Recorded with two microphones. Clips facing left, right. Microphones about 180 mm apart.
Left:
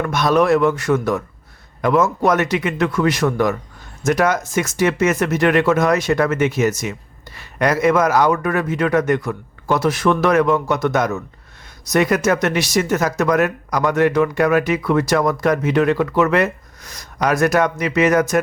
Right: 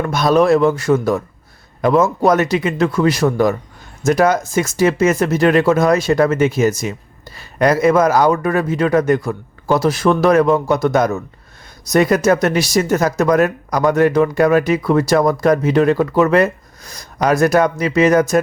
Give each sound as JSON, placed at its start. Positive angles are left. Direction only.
{"t": 0.0, "sound": "speech", "side_deg": -30}